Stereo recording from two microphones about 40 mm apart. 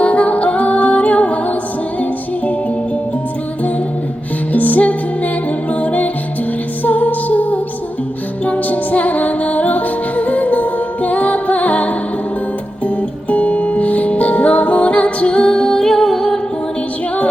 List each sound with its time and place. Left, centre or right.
0.0 s music: left
4.5 s music: left; by 16.4 s centre